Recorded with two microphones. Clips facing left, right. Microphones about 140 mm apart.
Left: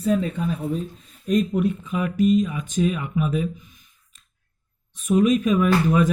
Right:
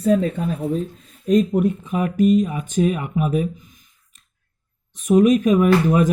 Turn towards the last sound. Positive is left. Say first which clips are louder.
# right 4 dB
turn(degrees=-45)  # may be behind; listen again after turning